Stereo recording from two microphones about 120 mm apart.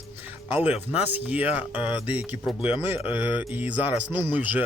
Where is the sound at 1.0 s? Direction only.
15° right (ahead or behind).